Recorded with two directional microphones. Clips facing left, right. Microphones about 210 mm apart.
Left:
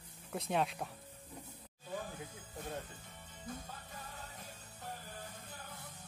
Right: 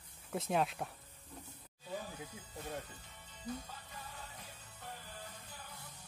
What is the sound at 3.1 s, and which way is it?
Music, 50° left (ahead or behind).